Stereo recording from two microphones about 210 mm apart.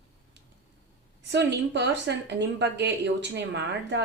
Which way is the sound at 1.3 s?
55° right (ahead or behind).